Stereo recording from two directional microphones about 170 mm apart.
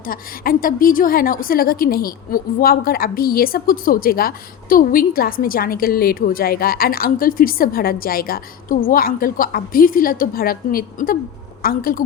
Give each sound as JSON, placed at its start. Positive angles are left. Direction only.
{"t": 0.0, "sound": "a woman's voice", "side_deg": 55}